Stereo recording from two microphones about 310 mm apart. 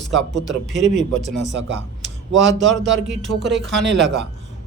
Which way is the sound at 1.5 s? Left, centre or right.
Right.